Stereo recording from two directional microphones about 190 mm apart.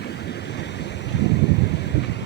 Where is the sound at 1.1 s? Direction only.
65° left (ahead or behind).